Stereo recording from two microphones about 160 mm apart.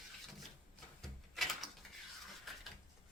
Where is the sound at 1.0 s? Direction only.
Centre (ahead or behind).